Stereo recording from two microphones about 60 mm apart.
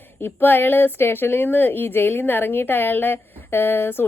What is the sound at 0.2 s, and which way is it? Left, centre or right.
Speech, left.